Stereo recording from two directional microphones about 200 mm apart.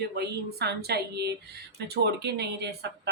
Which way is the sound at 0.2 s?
55° right (ahead or behind).